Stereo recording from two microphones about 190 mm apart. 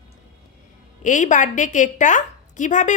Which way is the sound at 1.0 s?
40° left (ahead or behind).